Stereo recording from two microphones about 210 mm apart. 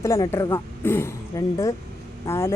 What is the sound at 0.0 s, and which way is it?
Speech, 15° left (ahead or behind).